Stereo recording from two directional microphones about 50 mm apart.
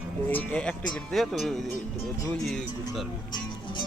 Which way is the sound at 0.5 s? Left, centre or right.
Left.